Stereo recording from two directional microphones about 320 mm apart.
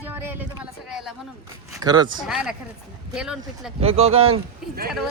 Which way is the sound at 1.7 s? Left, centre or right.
Centre.